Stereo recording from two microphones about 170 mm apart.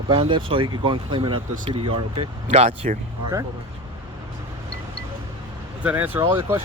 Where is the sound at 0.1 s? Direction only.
30° right (ahead or behind).